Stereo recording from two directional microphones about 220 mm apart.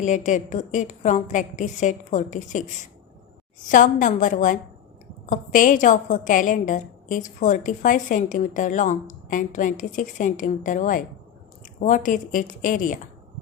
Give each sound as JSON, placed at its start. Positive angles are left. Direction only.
{"t": 0.0, "sound": "a woman's voice", "side_deg": 35}